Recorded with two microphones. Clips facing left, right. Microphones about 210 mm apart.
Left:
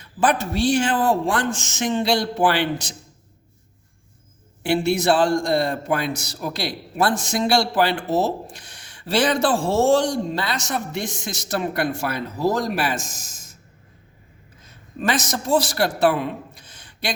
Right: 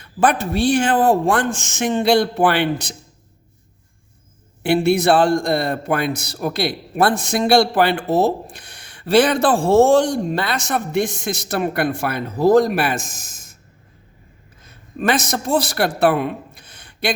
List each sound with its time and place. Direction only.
0.0 s a man's voice: 55° right (ahead or behind)
4.6 s a man's voice: 60° right (ahead or behind)
15.0 s a man's voice: 60° right (ahead or behind)